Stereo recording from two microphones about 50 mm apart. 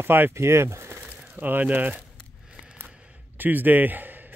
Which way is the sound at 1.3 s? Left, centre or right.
Right.